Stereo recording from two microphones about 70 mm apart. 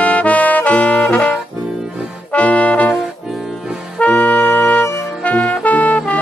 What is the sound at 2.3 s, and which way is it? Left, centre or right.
Brass instrument, centre.